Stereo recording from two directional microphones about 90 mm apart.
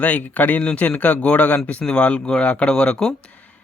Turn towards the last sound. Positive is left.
turn(degrees=10)  # may be behind; listen again after turning